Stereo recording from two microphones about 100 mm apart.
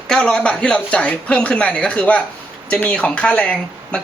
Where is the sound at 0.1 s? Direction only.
5° left (ahead or behind).